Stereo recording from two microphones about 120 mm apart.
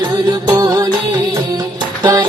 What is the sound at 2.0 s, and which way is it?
Music, 35° right (ahead or behind).